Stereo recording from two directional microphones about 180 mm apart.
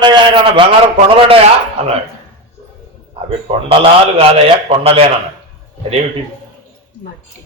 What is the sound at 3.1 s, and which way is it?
Speech, 30° right (ahead or behind).